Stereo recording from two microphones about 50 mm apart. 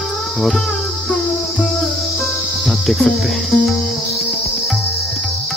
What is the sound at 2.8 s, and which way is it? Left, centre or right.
Cricket, centre.